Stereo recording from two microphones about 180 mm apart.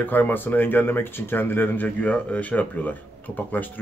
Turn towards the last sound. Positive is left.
turn(degrees=10)  # may be behind; listen again after turning